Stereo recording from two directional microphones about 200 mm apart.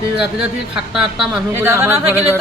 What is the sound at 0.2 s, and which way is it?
Speech, 5° right (ahead or behind).